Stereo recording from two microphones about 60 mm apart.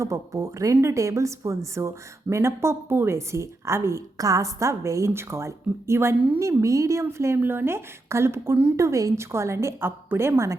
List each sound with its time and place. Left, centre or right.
0.0 s a woman's voice: right
4.2 s a woman's voice: right
7.0 s a woman's voice: right
7.4 s a woman's voice: right
8.7 s a woman's voice: right
9.3 s a woman's voice: right
9.8 s a woman's voice: right